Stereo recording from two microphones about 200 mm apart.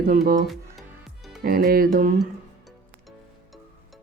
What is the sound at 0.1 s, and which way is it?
Speech, 40° right (ahead or behind).